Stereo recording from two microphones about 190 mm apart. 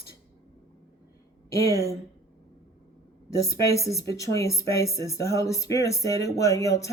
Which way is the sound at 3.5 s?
15° left (ahead or behind).